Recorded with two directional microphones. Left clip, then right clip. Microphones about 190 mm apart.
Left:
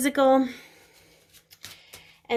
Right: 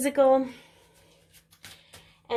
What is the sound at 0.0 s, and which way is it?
Speech, 30° left (ahead or behind).